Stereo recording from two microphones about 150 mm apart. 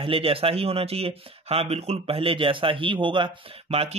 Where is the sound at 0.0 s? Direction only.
40° right (ahead or behind).